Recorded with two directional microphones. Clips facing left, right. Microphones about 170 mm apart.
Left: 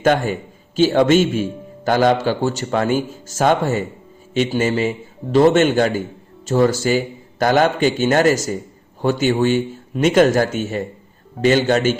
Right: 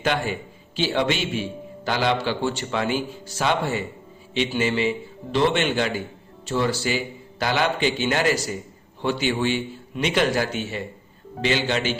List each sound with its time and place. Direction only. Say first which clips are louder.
0.0 s a man's voice: left 7 dB; 45° left (ahead or behind)